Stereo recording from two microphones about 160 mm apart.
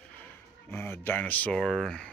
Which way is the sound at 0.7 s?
15° left (ahead or behind).